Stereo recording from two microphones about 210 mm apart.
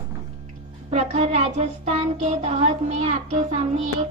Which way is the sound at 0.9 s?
30° right (ahead or behind).